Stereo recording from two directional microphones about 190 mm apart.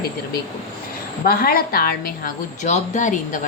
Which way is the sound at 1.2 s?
50° left (ahead or behind).